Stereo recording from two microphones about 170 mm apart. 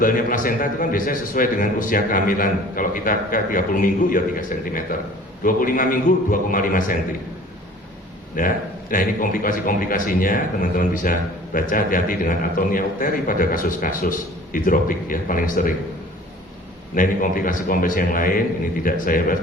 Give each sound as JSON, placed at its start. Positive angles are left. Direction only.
{"t": 0.0, "sound": "a man's voice", "side_deg": 55}
{"t": 8.4, "sound": "a man's voice", "side_deg": 50}
{"t": 16.9, "sound": "a man's voice", "side_deg": 55}